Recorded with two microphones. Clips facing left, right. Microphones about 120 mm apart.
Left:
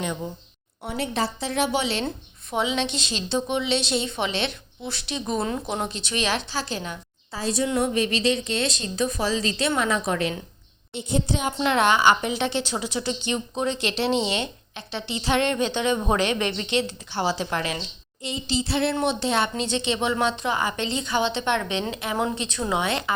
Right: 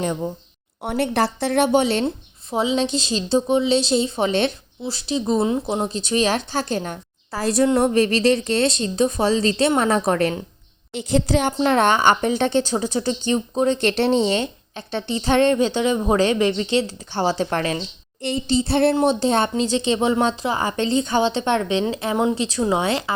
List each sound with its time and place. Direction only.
0.8 s a woman's voice: 60° right (ahead or behind)
2.0 s speech: 30° right (ahead or behind)
4.8 s a woman's voice: 35° right (ahead or behind)
10.9 s a woman's voice: 90° right
11.6 s a woman's voice: 45° right (ahead or behind)
18.2 s a woman's voice: 60° right (ahead or behind)
18.9 s speech: 40° right (ahead or behind)